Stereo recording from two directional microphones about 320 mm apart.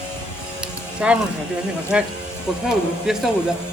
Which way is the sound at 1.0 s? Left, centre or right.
Centre.